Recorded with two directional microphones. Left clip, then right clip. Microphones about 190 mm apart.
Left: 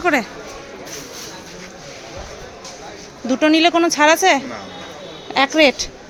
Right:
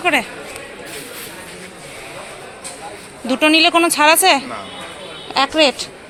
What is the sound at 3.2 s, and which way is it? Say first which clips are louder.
Speech: right 2 dB; 15° left (ahead or behind).